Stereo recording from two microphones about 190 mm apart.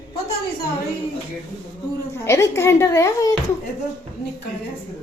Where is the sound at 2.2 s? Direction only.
15° left (ahead or behind).